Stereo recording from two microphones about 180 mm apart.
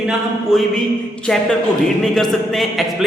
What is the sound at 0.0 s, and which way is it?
A man's voice, centre (ahead or behind).